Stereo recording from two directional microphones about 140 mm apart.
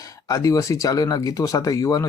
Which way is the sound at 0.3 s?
25° left (ahead or behind).